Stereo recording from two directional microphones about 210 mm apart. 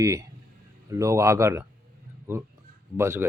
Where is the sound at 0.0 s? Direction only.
15° right (ahead or behind).